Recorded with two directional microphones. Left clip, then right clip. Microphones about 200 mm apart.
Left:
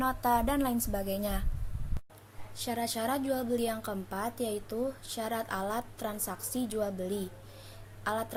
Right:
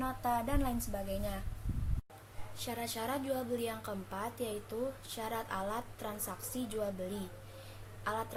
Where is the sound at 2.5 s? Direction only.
30° left (ahead or behind).